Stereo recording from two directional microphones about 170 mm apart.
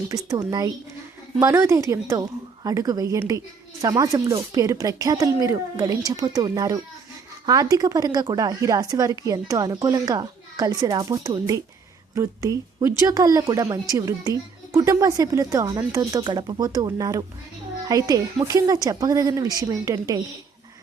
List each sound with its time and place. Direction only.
0.1 s a woman's voice: 20° right (ahead or behind)